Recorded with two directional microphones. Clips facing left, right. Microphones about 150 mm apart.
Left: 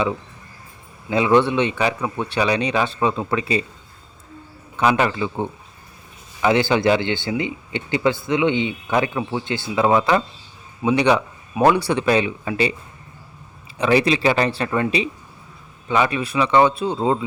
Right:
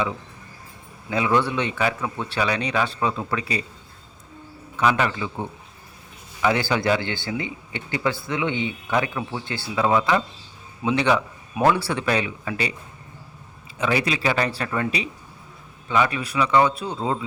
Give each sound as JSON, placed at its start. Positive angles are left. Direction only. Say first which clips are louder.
{"t": 1.1, "sound": "a man's voice", "louder": "left 5 dB", "side_deg": 25}
{"t": 4.8, "sound": "a man's voice", "louder": "left 3 dB", "side_deg": 30}
{"t": 10.8, "sound": "a man's voice", "louder": "left 4 dB", "side_deg": 15}
{"t": 13.7, "sound": "a man's voice", "louder": "left 6 dB", "side_deg": 30}